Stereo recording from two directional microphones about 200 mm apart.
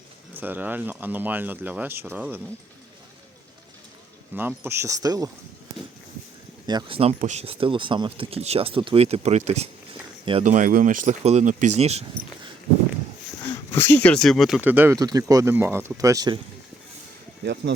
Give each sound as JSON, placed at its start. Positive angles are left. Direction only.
{"t": 0.3, "sound": "speech", "side_deg": -10}
{"t": 4.4, "sound": "speech", "side_deg": -10}
{"t": 6.7, "sound": "speech", "side_deg": -25}
{"t": 13.7, "sound": "speech", "side_deg": 10}
{"t": 17.4, "sound": "speech", "side_deg": -55}